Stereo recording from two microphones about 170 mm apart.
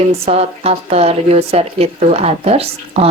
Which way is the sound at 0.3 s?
35° right (ahead or behind).